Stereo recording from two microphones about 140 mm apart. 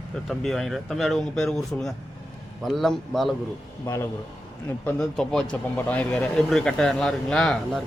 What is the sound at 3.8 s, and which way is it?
A man's voice, 20° left (ahead or behind).